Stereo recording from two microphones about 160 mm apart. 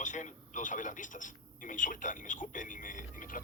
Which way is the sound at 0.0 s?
50° left (ahead or behind).